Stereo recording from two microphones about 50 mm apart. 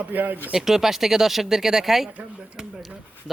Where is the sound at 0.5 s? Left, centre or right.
Centre.